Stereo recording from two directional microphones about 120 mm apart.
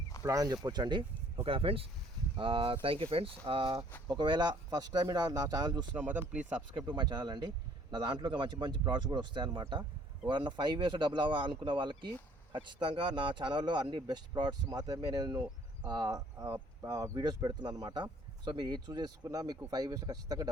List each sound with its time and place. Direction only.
0.2 s speech: 30° right (ahead or behind)
1.5 s speech: 50° right (ahead or behind); by 5.8 s 35° right (ahead or behind)
6.0 s speech: 15° right (ahead or behind)
6.7 s speech: 40° right (ahead or behind)